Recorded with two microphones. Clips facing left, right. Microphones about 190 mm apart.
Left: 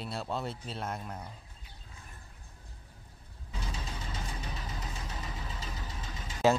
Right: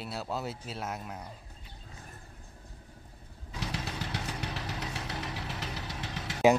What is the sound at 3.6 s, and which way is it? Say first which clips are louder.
Vehicle: right 5 dB; 75° right (ahead or behind).